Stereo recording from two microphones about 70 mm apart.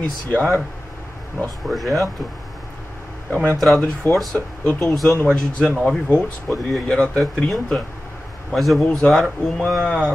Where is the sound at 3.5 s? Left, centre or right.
Centre.